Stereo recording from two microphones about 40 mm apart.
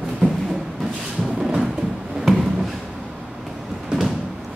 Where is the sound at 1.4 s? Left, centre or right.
Centre.